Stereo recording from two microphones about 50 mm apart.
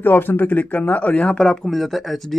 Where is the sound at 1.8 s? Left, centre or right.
Centre.